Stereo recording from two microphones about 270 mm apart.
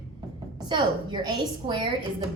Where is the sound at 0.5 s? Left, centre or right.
Centre.